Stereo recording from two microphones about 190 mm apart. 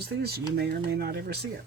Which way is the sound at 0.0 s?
60° right (ahead or behind).